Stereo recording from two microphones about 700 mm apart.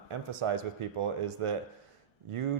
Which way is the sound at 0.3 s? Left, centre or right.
Right.